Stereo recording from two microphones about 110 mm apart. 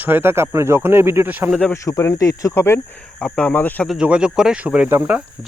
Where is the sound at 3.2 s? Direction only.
10° left (ahead or behind).